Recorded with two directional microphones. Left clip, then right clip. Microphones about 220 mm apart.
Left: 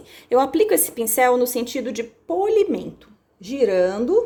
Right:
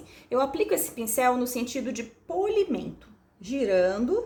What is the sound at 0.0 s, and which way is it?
A woman's voice, 40° left (ahead or behind).